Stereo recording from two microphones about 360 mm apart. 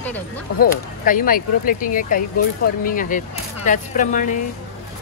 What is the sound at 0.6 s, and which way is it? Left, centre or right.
Speech, left.